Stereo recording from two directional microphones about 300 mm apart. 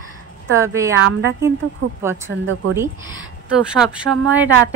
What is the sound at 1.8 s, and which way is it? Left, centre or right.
Speech, right.